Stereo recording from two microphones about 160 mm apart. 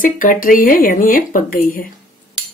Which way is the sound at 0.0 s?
60° left (ahead or behind).